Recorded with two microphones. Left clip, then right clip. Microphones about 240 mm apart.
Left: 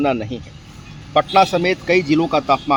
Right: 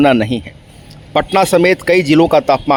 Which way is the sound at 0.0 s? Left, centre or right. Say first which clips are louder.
Right 8 dB; right.